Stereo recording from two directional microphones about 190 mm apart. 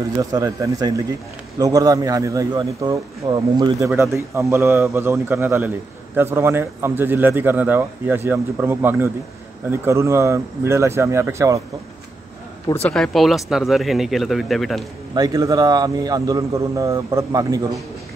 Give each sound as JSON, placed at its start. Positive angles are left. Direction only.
{"t": 0.2, "sound": "a man's voice", "side_deg": -15}
{"t": 12.9, "sound": "speech", "side_deg": 0}
{"t": 15.1, "sound": "a man's voice", "side_deg": -20}